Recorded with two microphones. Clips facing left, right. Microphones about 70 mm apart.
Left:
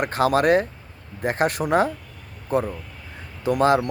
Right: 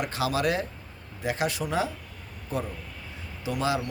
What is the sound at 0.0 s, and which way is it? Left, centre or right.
A man's voice, left.